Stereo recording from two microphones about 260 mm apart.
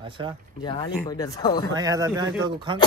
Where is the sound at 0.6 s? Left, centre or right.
Centre.